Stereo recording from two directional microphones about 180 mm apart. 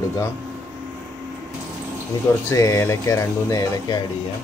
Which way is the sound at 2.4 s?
15° left (ahead or behind).